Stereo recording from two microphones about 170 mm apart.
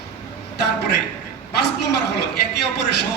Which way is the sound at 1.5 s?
75° left (ahead or behind).